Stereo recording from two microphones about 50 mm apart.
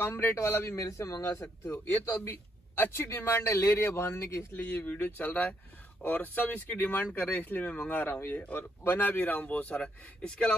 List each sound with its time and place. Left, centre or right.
0.0 s a man's voice: left
0.4 s a man's voice: left
1.3 s a man's voice: left
4.6 s speech: left
10.2 s speech: centre